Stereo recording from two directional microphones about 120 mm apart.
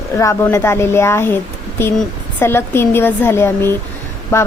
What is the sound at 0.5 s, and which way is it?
A woman's voice, 20° left (ahead or behind).